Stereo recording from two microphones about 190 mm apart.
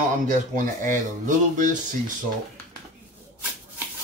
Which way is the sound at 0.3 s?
40° right (ahead or behind).